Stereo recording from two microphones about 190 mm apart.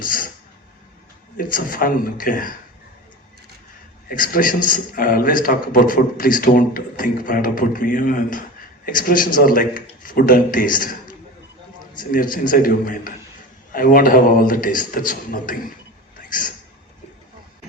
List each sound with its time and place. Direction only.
0.0 s a sound: 45° left (ahead or behind)
1.4 s a man's voice: 45° left (ahead or behind)
4.1 s a man's voice: 45° left (ahead or behind)